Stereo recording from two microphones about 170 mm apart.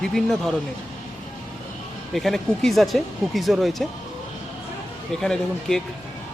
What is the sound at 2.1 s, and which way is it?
Speech, centre (ahead or behind).